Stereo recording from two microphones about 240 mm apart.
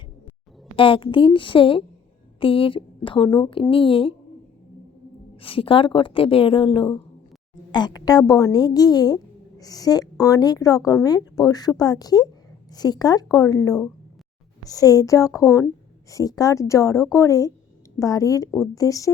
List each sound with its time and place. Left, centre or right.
0.8 s a woman's voice: left
5.4 s a woman's voice: left